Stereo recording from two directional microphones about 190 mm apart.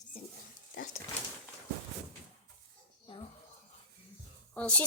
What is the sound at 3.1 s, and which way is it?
Speech, 25° left (ahead or behind).